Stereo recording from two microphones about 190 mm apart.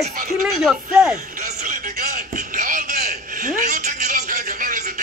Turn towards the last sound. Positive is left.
turn(degrees=-45)  # may be behind; listen again after turning